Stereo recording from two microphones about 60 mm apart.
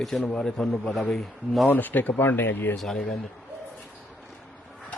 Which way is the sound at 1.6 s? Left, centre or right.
Left.